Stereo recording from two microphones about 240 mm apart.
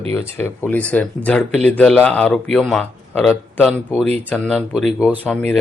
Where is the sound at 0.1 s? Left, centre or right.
Centre.